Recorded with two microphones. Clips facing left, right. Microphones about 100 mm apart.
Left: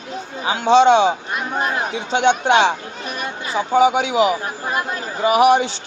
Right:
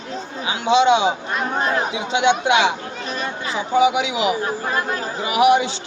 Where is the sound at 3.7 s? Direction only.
35° left (ahead or behind).